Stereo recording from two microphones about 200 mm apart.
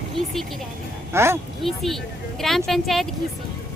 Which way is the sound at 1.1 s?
10° right (ahead or behind).